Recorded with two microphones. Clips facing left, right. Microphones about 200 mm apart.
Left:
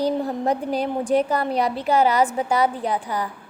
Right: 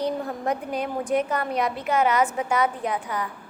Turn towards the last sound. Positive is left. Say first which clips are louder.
# left 3 dB
turn(degrees=35)  # may be behind; listen again after turning